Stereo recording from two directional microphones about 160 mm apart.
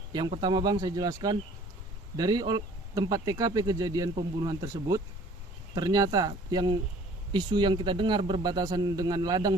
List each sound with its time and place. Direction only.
0.1 s a man's voice: 25° right (ahead or behind)